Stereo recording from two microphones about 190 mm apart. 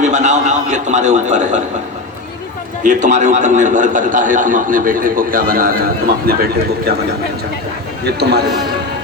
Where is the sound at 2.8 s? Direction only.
40° right (ahead or behind).